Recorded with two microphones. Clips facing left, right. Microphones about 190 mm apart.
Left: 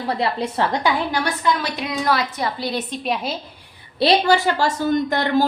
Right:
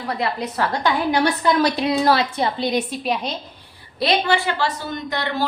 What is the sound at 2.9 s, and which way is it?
Speech, centre (ahead or behind).